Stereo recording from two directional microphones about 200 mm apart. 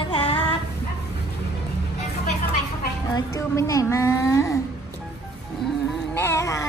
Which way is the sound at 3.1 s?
15° left (ahead or behind).